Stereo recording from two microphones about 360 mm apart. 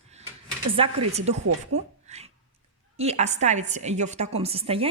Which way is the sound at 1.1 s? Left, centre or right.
Centre.